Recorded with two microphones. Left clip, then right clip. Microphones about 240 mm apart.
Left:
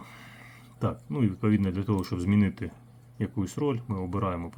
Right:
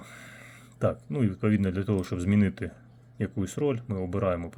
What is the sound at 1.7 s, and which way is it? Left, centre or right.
Speech, left.